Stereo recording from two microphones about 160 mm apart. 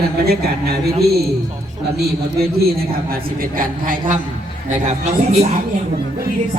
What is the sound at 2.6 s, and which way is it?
A man's voice, 70° right (ahead or behind).